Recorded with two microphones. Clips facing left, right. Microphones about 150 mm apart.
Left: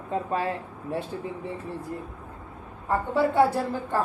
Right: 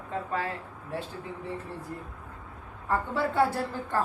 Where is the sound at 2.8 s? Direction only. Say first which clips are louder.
Left 4 dB; 20° left (ahead or behind).